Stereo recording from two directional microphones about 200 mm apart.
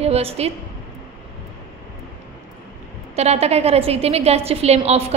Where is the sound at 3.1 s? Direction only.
30° right (ahead or behind).